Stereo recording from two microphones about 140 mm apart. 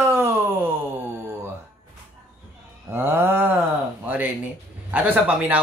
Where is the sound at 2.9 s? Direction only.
15° right (ahead or behind).